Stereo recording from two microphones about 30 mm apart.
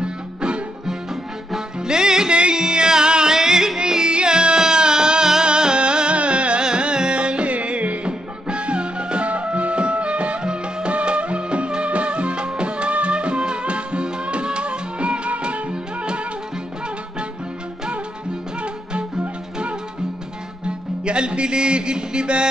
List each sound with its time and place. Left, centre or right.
0.0 s music: right
1.8 s music: right
4.1 s music: right
8.0 s music: right
15.7 s music: right
20.6 s music: right